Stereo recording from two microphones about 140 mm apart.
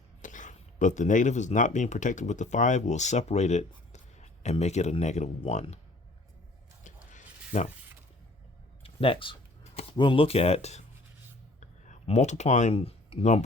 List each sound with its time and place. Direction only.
0.2 s a man's voice: 65° left (ahead or behind)
6.8 s a sound: 60° left (ahead or behind)
8.8 s speech: 40° left (ahead or behind)